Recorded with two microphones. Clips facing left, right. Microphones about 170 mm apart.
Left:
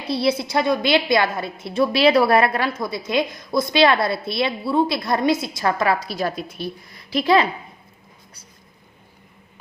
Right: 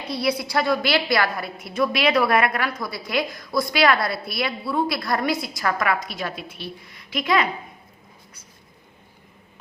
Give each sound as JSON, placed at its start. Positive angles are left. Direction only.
{"t": 0.1, "sound": "a woman's voice", "side_deg": 25}